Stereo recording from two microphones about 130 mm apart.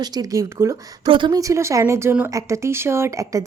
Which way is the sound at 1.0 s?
35° right (ahead or behind).